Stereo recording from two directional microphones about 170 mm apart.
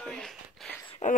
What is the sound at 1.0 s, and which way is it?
Speech, 45° left (ahead or behind).